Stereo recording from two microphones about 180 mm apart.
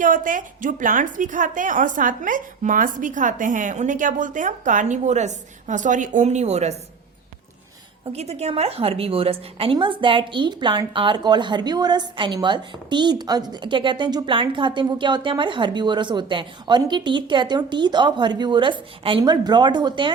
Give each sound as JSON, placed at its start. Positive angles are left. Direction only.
{"t": 0.0, "sound": "a woman's voice", "side_deg": -45}
{"t": 8.1, "sound": "a woman's voice", "side_deg": -35}